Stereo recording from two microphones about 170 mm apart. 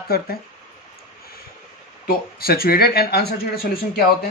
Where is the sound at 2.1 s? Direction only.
65° left (ahead or behind).